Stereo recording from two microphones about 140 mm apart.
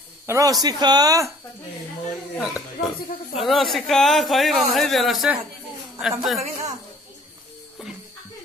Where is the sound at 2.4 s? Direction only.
Centre (ahead or behind).